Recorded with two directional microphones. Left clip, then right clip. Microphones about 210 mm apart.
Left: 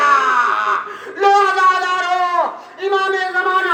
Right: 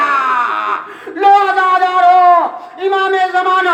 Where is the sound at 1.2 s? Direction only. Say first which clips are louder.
Right 3 dB; 35° right (ahead or behind).